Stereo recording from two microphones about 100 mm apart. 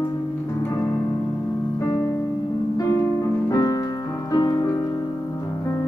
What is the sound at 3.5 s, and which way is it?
Music, 40° left (ahead or behind).